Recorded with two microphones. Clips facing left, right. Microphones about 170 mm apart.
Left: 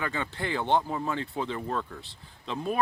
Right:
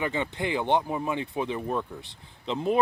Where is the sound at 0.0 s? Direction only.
20° right (ahead or behind).